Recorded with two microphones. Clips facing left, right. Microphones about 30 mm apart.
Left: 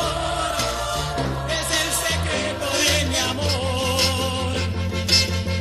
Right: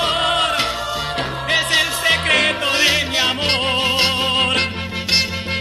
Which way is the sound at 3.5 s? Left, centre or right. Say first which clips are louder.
Right 6 dB; right.